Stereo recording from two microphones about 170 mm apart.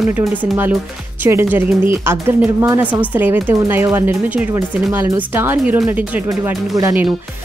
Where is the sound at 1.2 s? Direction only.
10° right (ahead or behind).